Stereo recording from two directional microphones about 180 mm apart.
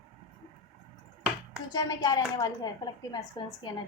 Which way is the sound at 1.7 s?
20° left (ahead or behind).